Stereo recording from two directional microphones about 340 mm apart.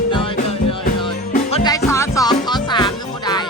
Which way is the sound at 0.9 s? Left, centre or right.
Centre.